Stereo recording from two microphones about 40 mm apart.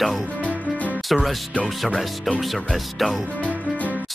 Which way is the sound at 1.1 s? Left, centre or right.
Centre.